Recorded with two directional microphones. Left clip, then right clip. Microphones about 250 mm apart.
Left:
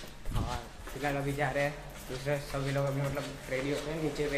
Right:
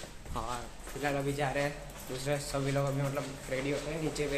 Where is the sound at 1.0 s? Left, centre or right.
Centre.